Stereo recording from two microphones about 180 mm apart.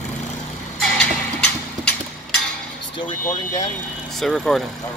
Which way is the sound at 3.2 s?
20° left (ahead or behind).